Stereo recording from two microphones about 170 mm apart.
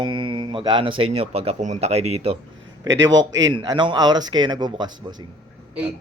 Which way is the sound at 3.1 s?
90° right.